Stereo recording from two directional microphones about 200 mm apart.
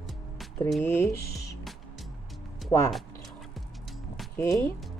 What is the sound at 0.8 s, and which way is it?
Speech, 10° left (ahead or behind).